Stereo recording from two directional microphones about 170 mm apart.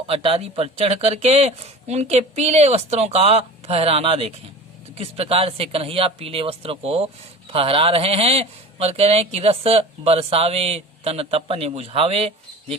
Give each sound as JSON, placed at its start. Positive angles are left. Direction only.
{"t": 0.1, "sound": "speech", "side_deg": -35}